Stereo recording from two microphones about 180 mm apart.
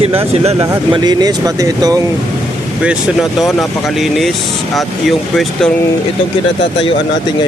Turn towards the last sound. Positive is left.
turn(degrees=0)  # may be behind; listen again after turning